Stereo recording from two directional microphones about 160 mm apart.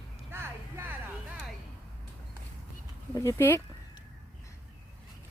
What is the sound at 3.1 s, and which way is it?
Speech, 15° left (ahead or behind).